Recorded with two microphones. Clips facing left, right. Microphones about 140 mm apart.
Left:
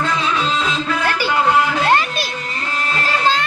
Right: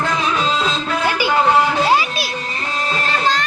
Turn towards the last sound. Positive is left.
turn(degrees=-5)  # may be behind; listen again after turning